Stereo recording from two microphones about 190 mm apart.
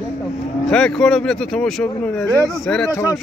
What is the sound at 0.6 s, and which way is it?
Speech, 5° left (ahead or behind).